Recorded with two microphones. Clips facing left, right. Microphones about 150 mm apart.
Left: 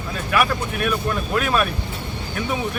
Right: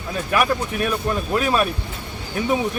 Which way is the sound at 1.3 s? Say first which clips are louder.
Right 1 dB; 25° right (ahead or behind).